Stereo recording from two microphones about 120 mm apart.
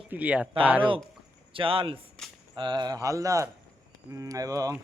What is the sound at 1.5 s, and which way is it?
Speech, 50° right (ahead or behind).